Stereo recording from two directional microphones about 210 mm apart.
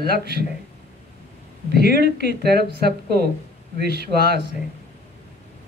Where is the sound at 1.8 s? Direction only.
50° right (ahead or behind).